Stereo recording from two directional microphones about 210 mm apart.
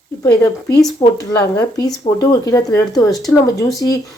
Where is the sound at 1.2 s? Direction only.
15° left (ahead or behind).